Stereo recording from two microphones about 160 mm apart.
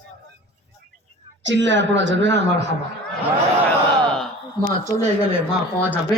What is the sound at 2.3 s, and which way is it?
Speech, 90° right.